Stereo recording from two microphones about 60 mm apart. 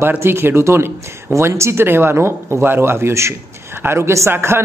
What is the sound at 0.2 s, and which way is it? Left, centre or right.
Speech, right.